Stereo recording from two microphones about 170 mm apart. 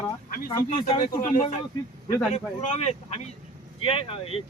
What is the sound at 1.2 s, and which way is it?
Speech, 50° left (ahead or behind).